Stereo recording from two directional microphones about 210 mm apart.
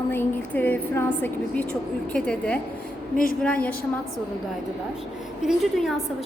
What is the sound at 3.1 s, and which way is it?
Speech, 45° left (ahead or behind).